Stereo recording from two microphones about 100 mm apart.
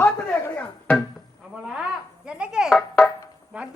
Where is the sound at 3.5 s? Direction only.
10° right (ahead or behind).